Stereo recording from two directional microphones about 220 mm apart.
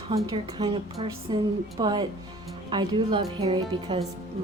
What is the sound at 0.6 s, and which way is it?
Speech, 20° right (ahead or behind).